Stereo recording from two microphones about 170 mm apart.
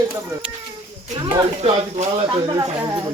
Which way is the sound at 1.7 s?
30° right (ahead or behind).